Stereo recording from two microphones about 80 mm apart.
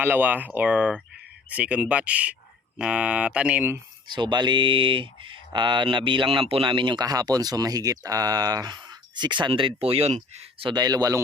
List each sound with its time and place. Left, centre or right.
0.0 s speech: right
4.1 s speech: right
7.0 s speech: right
10.8 s speech: right